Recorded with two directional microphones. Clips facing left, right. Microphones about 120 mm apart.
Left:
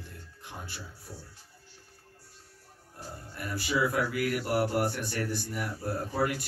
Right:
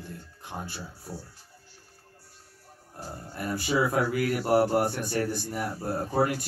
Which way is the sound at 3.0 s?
35° right (ahead or behind).